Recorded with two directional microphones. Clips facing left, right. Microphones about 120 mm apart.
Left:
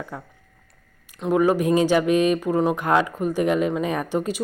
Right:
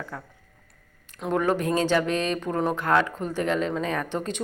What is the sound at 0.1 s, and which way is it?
Speech, 15° left (ahead or behind).